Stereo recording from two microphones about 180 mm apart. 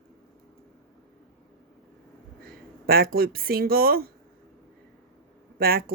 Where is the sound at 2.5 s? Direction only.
55° right (ahead or behind).